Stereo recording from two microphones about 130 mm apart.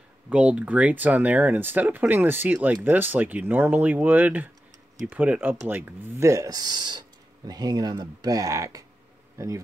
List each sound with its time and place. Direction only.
0.3 s speech: 10° right (ahead or behind); by 8.8 s 25° right (ahead or behind)